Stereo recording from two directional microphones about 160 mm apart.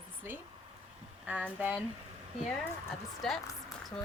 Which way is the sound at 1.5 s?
10° right (ahead or behind).